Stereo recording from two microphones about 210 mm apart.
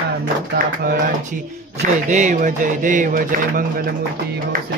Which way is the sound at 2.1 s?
35° right (ahead or behind).